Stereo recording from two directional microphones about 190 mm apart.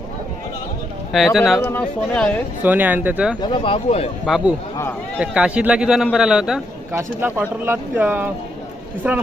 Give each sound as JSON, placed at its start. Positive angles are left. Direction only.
{"t": 1.1, "sound": "a man's voice", "side_deg": 0}
{"t": 2.6, "sound": "speech", "side_deg": -10}
{"t": 3.4, "sound": "speech", "side_deg": 25}
{"t": 4.3, "sound": "a man's voice", "side_deg": 0}
{"t": 4.8, "sound": "speech", "side_deg": 10}
{"t": 5.2, "sound": "a man's voice", "side_deg": -5}